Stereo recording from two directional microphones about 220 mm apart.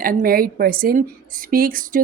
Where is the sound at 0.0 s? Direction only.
40° right (ahead or behind).